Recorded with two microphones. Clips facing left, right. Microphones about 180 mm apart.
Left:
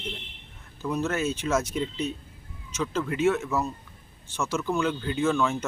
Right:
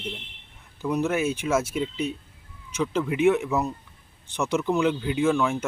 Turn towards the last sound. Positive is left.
turn(degrees=-10)  # may be behind; listen again after turning